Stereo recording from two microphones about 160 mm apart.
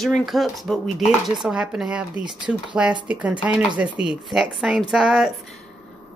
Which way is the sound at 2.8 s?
5° right (ahead or behind).